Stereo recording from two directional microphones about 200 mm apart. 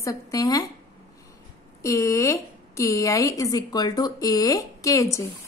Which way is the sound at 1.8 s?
15° left (ahead or behind).